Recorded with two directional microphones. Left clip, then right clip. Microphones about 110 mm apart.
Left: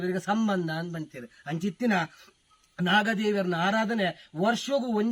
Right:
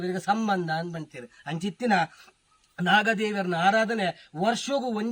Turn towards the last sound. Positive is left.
turn(degrees=-40)  # may be behind; listen again after turning